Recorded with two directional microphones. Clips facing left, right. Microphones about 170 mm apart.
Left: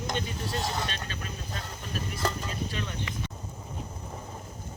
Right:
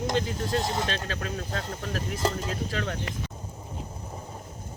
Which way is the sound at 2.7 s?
80° right.